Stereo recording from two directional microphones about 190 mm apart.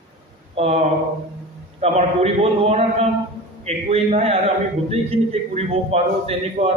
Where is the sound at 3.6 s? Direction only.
35° right (ahead or behind).